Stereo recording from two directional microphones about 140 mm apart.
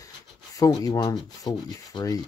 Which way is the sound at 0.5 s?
25° left (ahead or behind).